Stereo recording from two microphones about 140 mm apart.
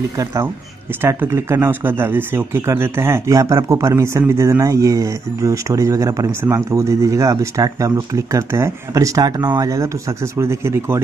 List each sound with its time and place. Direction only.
0.2 s speech: 20° right (ahead or behind)